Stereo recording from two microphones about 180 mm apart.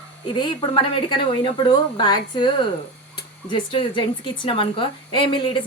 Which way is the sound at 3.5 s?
25° left (ahead or behind).